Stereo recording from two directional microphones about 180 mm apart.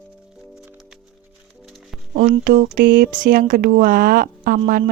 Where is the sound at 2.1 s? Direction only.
50° right (ahead or behind).